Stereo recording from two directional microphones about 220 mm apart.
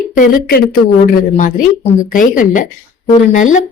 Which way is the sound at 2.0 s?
40° left (ahead or behind).